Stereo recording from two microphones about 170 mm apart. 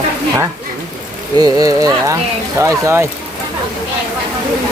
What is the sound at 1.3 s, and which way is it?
Speech, 20° right (ahead or behind).